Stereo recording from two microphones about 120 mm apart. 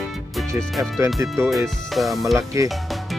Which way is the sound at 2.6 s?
25° right (ahead or behind).